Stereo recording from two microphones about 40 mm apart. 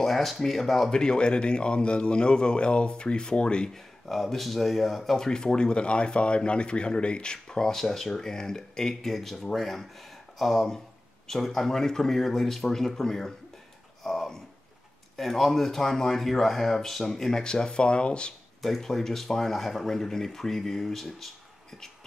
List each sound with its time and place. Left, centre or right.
0.0 s speech: centre
0.9 s speech: left
3.7 s speech: centre
9.1 s speech: centre; by 18.3 s left
18.6 s speech: centre